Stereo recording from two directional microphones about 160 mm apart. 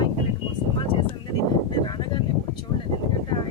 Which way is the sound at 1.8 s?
30° left (ahead or behind).